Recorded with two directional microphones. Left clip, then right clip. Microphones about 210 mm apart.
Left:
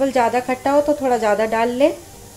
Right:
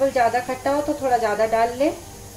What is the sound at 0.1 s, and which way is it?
Speech, 40° left (ahead or behind).